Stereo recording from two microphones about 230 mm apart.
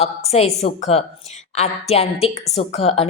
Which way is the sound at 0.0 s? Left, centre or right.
Left.